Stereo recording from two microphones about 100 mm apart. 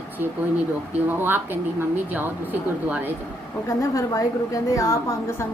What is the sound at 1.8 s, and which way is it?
A woman's voice, 20° right (ahead or behind).